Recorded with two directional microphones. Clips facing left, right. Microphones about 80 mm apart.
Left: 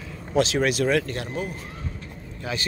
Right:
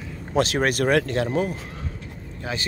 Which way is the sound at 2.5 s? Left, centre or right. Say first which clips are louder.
Even; right.